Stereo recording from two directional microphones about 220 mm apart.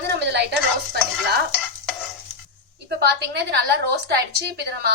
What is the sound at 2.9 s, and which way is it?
A woman's voice, 45° right (ahead or behind).